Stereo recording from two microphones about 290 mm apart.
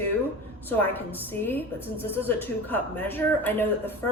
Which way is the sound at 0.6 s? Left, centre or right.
Centre.